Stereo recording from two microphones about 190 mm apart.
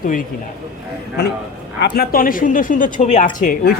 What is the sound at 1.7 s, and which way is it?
A woman's voice, 60° left (ahead or behind).